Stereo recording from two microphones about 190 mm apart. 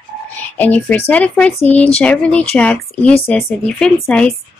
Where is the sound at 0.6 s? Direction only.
10° left (ahead or behind).